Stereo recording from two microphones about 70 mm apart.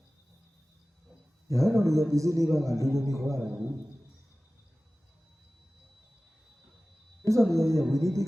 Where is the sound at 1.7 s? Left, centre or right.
Right.